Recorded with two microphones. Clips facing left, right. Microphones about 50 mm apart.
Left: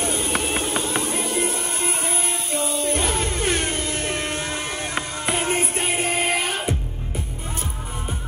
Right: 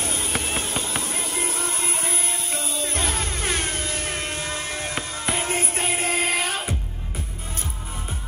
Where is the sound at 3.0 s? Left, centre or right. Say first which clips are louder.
Left 3 dB; left.